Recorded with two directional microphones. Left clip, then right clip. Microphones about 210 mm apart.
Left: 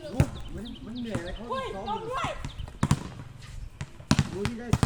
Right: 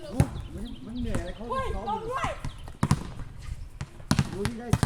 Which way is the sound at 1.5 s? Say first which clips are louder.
Right 2 dB; centre (ahead or behind).